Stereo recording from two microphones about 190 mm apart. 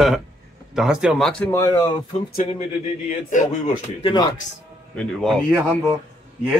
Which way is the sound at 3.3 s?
40° left (ahead or behind).